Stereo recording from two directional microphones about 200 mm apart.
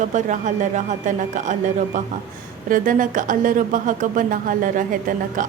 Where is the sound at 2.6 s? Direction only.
40° right (ahead or behind).